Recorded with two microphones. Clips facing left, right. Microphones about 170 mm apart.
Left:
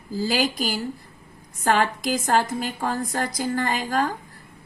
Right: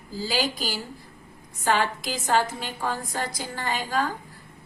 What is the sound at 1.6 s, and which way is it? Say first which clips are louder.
A woman's voice: left 3 dB; 45° left (ahead or behind).